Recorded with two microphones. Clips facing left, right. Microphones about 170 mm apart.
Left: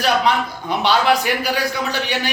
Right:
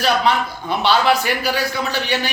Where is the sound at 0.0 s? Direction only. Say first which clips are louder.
Even; 15° left (ahead or behind).